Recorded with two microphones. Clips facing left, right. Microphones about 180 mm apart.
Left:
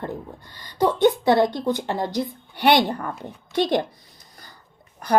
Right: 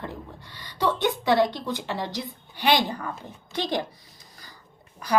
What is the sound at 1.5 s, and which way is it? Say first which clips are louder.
Speech: left 6 dB; 50° left (ahead or behind).